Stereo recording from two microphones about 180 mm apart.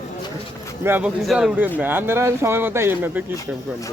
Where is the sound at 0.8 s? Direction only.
10° right (ahead or behind).